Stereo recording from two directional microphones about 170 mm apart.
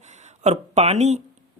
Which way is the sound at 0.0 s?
40° right (ahead or behind).